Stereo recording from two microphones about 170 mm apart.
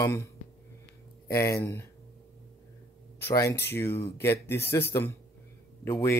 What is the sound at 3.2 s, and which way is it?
Speech, 15° left (ahead or behind).